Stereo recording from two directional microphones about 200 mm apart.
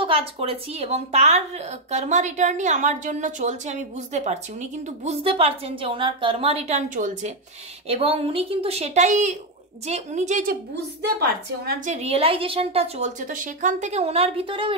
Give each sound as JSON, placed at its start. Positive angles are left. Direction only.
{"t": 0.0, "sound": "speech", "side_deg": -25}